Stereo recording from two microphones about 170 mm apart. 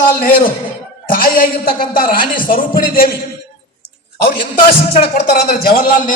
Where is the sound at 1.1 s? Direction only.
60° left (ahead or behind).